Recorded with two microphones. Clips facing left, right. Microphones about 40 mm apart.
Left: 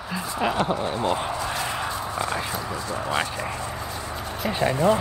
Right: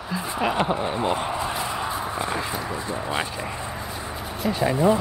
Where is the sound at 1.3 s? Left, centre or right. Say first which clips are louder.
Right 1 dB; centre.